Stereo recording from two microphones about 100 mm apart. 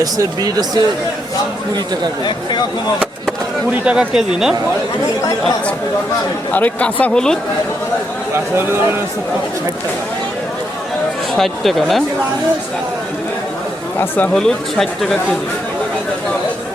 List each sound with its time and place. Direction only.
0.0 s speech: 40° right (ahead or behind)
2.2 s speech: 45° left (ahead or behind)
3.7 s speech: 10° right (ahead or behind)
6.5 s speech: 15° left (ahead or behind)
11.3 s speech: centre (ahead or behind)
14.3 s speech: 5° left (ahead or behind)